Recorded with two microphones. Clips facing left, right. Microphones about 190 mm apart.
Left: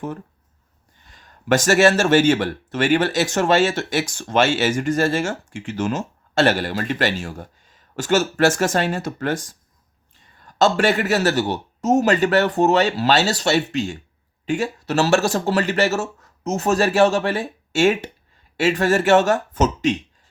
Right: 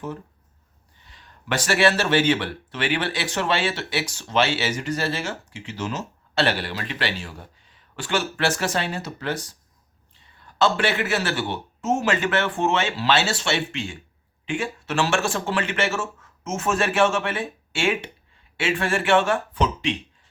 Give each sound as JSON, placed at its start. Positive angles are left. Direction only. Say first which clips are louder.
{"t": 1.0, "sound": "speech", "louder": "left 8 dB", "side_deg": 45}